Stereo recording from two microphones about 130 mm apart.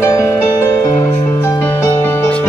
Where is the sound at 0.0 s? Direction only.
20° left (ahead or behind).